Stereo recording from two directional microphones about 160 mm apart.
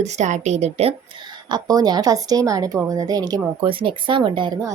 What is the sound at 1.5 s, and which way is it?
A woman's voice, 25° right (ahead or behind).